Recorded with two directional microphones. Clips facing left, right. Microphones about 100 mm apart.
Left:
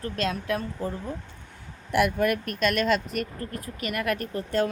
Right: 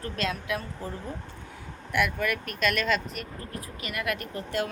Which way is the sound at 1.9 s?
50° left (ahead or behind).